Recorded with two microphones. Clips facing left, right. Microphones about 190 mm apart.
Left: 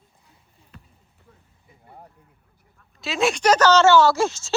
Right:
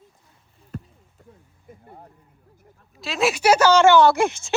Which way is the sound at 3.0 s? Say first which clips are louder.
Even; centre (ahead or behind).